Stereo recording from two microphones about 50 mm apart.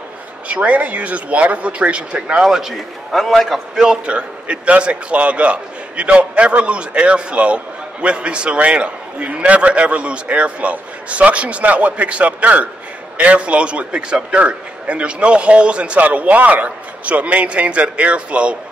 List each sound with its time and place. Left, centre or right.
0.5 s a man's voice: right
2.4 s a man's voice: centre
3.8 s a man's voice: centre